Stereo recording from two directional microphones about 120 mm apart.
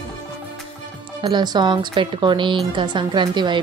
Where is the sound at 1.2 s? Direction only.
35° right (ahead or behind).